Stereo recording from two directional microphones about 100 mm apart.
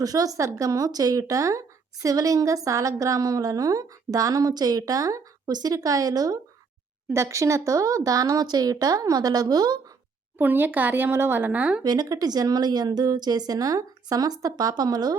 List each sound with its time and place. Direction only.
0.0 s a woman's voice: 40° right (ahead or behind)
10.3 s speech: 20° right (ahead or behind)
11.8 s a woman's voice: 40° right (ahead or behind)